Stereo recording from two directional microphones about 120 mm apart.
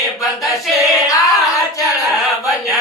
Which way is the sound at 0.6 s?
Centre (ahead or behind).